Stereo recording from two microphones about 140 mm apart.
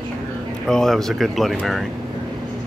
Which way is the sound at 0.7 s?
5° left (ahead or behind).